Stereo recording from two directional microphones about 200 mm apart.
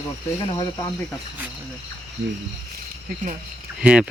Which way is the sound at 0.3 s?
25° left (ahead or behind).